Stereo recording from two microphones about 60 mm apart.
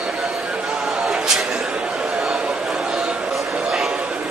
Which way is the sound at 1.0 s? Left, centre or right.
Centre.